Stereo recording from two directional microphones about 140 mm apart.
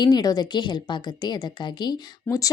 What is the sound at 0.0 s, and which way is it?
A woman's voice, 30° left (ahead or behind).